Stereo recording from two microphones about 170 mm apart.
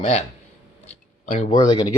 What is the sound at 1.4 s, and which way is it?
Speech, 25° left (ahead or behind).